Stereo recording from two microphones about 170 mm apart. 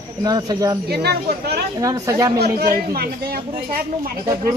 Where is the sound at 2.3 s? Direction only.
65° right (ahead or behind).